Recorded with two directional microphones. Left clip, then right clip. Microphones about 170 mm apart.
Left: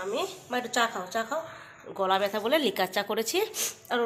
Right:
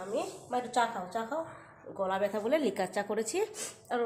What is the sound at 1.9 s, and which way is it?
Speech, 15° left (ahead or behind).